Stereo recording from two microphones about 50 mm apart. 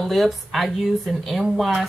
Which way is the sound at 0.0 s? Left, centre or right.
Centre.